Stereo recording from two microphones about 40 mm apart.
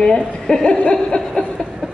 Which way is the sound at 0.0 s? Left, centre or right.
Centre.